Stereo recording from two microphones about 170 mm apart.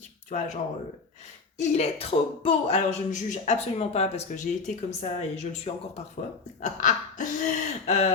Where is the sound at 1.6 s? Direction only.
40° left (ahead or behind).